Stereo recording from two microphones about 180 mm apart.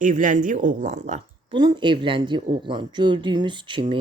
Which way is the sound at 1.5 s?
25° right (ahead or behind).